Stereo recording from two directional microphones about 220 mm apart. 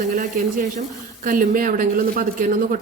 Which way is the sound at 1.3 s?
40° right (ahead or behind).